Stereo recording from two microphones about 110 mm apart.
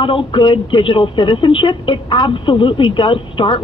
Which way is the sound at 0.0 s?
50° left (ahead or behind).